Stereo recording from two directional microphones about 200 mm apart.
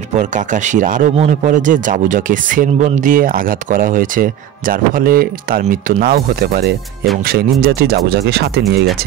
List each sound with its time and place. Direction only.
0.1 s speech: 40° right (ahead or behind); by 8.8 s 55° right (ahead or behind)